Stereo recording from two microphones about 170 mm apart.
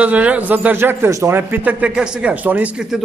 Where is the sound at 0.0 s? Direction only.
10° right (ahead or behind).